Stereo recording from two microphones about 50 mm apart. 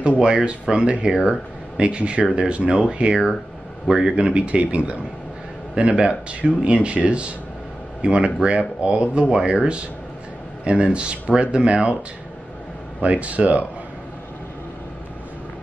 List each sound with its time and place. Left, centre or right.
0.2 s speech: centre
1.1 s speech: centre
1.8 s speech: right
13.0 s speech: right